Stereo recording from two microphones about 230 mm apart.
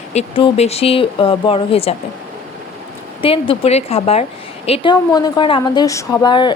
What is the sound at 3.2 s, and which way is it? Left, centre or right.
A woman's voice, left.